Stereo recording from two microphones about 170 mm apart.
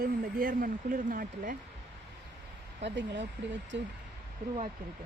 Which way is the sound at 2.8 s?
90° right.